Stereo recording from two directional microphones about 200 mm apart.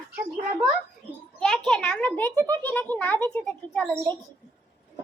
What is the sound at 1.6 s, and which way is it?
Speech, 5° left (ahead or behind).